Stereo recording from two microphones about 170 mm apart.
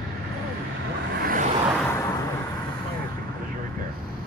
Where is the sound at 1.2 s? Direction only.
55° right (ahead or behind).